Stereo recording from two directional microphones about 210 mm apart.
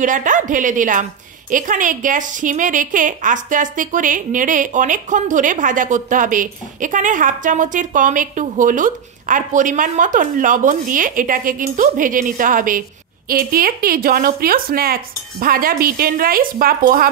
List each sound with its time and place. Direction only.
0.0 s a woman's voice: 40° right (ahead or behind)